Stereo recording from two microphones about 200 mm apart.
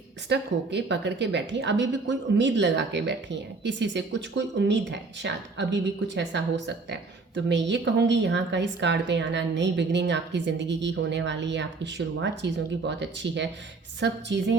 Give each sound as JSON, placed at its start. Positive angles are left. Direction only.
{"t": 0.3, "sound": "a woman's voice", "side_deg": -60}